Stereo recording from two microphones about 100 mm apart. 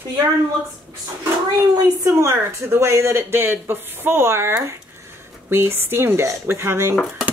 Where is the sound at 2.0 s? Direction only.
30° right (ahead or behind).